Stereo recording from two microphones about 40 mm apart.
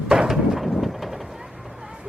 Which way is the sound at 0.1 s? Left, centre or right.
Centre.